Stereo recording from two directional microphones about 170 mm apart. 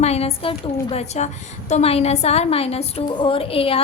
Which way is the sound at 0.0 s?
35° left (ahead or behind).